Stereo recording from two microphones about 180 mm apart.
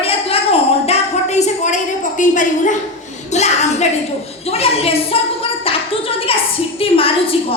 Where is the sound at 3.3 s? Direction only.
40° left (ahead or behind).